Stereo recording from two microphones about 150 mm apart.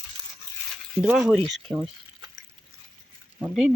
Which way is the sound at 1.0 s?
5° right (ahead or behind).